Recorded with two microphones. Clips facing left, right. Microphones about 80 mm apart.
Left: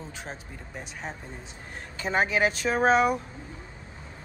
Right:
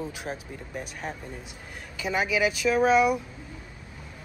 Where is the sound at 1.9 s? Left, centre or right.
Left.